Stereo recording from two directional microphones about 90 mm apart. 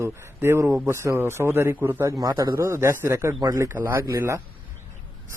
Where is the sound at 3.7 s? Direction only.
25° right (ahead or behind).